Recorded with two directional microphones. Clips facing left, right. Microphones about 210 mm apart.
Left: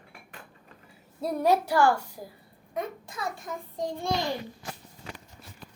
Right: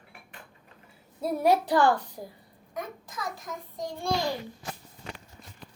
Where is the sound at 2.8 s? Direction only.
30° left (ahead or behind).